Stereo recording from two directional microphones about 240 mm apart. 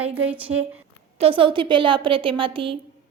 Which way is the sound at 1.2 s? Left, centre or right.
Right.